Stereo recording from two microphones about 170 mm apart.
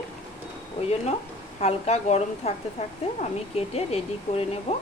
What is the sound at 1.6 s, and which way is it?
Speech, 40° left (ahead or behind).